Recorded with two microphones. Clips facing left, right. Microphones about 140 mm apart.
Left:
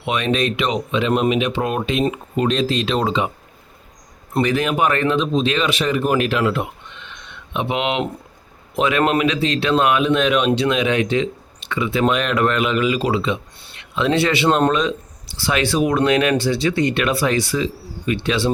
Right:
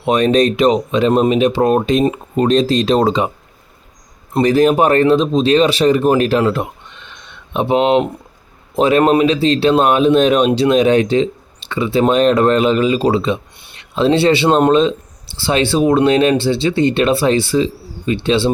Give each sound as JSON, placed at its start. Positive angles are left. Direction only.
{"t": 0.0, "sound": "speech", "side_deg": -40}
{"t": 4.4, "sound": "speech", "side_deg": -35}